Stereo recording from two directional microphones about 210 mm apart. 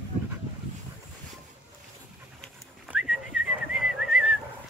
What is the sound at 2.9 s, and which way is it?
Whistling, 5° right (ahead or behind).